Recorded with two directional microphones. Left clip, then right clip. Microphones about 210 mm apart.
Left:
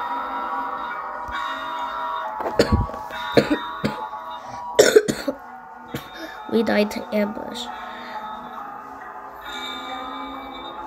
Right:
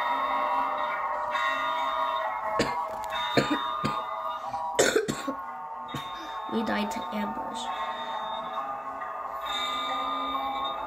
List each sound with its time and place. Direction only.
2.6 s speech: 25° left (ahead or behind)
3.3 s music: 25° left (ahead or behind)
4.7 s cough: 25° left (ahead or behind)
6.5 s speech: 30° left (ahead or behind)